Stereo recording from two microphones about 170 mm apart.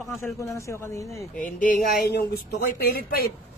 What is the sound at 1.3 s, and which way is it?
A woman's voice, 55° left (ahead or behind).